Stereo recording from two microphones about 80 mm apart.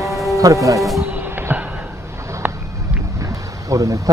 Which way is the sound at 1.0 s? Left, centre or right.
Right.